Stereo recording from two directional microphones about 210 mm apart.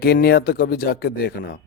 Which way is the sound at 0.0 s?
45° left (ahead or behind).